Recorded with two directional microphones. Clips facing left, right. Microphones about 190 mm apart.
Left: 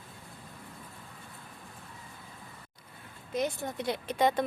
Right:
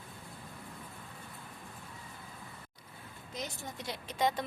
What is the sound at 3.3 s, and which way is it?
A woman's voice, 55° left (ahead or behind).